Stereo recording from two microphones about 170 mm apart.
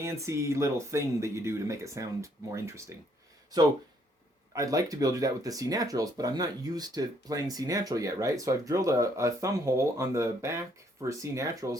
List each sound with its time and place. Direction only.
0.0 s speech: 15° right (ahead or behind)
4.5 s speech: 20° right (ahead or behind)